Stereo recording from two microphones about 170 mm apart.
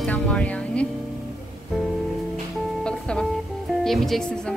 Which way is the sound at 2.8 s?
5° left (ahead or behind).